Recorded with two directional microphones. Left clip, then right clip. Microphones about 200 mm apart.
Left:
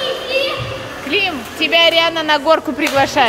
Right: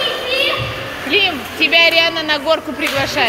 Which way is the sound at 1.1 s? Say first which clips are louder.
Right 2 dB; 15° left (ahead or behind).